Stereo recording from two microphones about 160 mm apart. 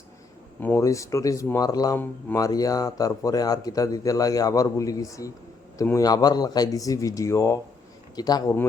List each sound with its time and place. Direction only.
0.6 s speech: 15° left (ahead or behind)